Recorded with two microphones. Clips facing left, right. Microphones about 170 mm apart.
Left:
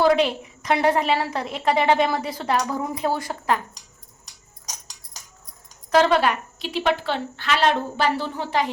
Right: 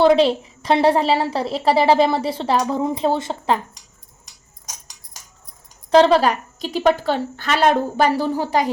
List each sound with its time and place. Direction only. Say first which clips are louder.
0.0 s a woman's voice: right 5 dB; 30° right (ahead or behind)
5.9 s a woman's voice: right 5 dB; 30° right (ahead or behind)